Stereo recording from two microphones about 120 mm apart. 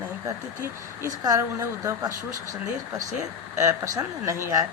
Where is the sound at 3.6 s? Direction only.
25° right (ahead or behind).